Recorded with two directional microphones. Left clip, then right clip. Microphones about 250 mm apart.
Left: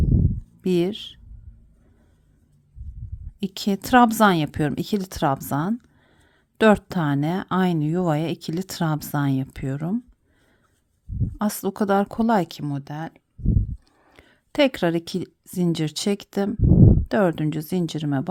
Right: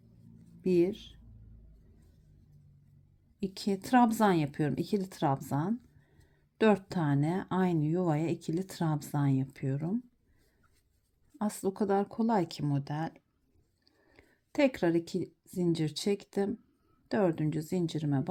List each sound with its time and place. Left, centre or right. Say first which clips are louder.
0.6 s speech: left 5 dB; centre
3.4 s speech: left 8 dB; centre
11.3 s a woman's voice: left 7 dB; centre